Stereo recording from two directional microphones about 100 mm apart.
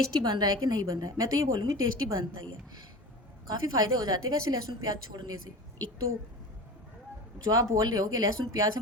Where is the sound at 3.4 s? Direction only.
40° right (ahead or behind).